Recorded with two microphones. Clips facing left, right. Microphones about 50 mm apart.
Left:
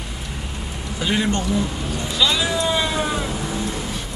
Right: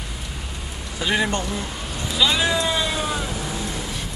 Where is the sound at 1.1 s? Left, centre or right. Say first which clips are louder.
Even; centre.